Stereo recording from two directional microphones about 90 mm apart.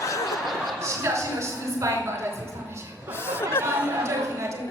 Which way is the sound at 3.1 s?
25° left (ahead or behind).